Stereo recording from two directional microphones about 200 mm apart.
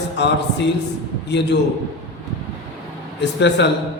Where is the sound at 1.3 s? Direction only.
60° left (ahead or behind).